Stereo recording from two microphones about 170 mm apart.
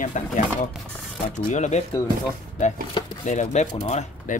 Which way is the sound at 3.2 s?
45° left (ahead or behind).